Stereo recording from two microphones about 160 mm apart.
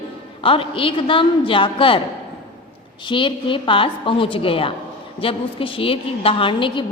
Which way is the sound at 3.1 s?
30° left (ahead or behind).